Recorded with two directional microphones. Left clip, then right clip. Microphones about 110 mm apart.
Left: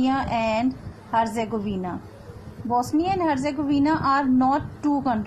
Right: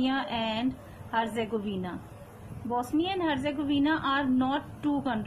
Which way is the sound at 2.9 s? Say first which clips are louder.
Left 6 dB; 35° left (ahead or behind).